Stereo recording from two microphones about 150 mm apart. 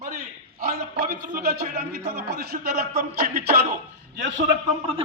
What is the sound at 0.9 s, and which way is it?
A man's voice, 70° right (ahead or behind).